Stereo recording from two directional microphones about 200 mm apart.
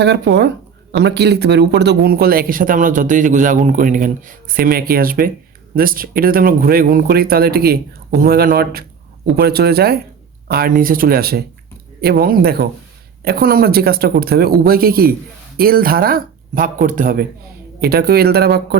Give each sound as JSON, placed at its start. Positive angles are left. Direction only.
{"t": 0.0, "sound": "speech", "side_deg": -55}